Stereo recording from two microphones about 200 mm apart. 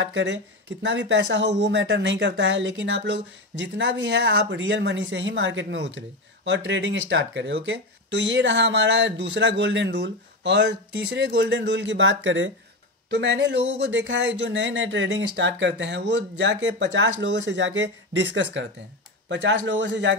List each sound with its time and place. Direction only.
0.0 s a man's voice: 65° right (ahead or behind)